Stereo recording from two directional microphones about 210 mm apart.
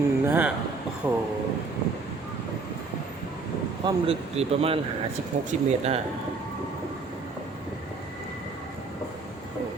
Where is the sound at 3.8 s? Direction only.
25° right (ahead or behind).